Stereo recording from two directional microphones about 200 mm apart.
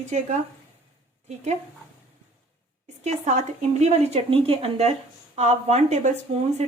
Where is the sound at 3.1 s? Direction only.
35° right (ahead or behind).